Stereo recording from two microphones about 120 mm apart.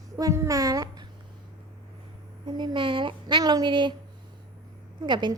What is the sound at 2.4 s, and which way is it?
A woman's voice, 40° right (ahead or behind).